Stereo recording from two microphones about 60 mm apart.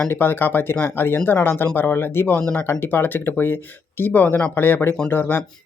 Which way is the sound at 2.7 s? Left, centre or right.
Left.